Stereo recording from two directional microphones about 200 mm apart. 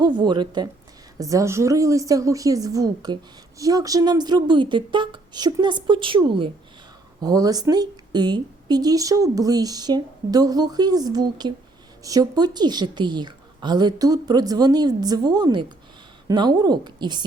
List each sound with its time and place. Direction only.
0.0 s a woman's voice: 20° right (ahead or behind)